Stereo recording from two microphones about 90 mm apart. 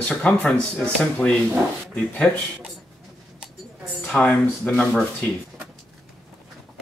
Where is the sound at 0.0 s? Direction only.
10° left (ahead or behind).